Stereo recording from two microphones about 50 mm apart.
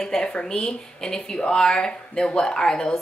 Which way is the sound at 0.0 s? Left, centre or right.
Centre.